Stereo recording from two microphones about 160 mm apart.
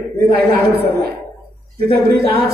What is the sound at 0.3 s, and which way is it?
Speech, 75° right (ahead or behind).